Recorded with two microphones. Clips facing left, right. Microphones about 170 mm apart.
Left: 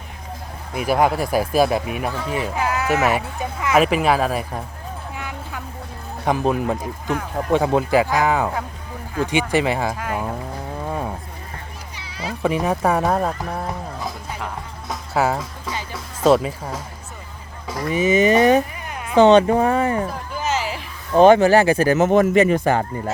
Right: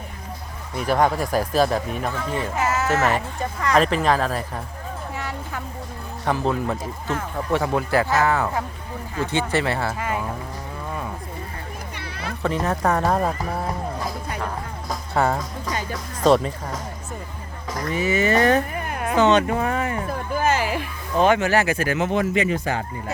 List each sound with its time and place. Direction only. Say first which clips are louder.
0.7 s speech: left 2 dB; 10° left (ahead or behind)
2.6 s a sound: right 2 dB; centre (ahead or behind)
2.9 s speech: left 2 dB; 15° left (ahead or behind)
5.1 s vehicle: right 1 dB; centre (ahead or behind)
6.2 s speech: left 3 dB; 15° left (ahead or behind)
10.0 s speech: left 1 dB; centre (ahead or behind)
11.9 s children playing: left 4 dB; 60° right (ahead or behind)
12.4 s speech: left 3 dB; 10° left (ahead or behind)
14.8 s music: left 1 dB; 5° left (ahead or behind)
17.7 s speech: left 4 dB; 10° left (ahead or behind)
18.7 s music: right 5 dB; 50° right (ahead or behind)
19.1 s speech: left 6 dB; 30° left (ahead or behind)
20.3 s music: right 4 dB; 55° right (ahead or behind)
21.2 s speech: left 7 dB; 35° left (ahead or behind); by 22.8 s 55° left (ahead or behind)